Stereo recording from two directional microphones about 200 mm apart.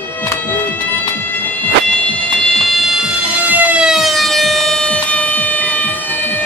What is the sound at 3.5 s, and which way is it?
Siren, 5° right (ahead or behind).